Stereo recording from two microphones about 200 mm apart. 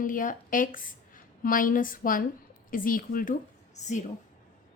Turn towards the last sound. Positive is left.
turn(degrees=35)  # may be behind; listen again after turning